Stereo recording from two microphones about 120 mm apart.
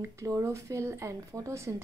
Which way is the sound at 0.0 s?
25° right (ahead or behind).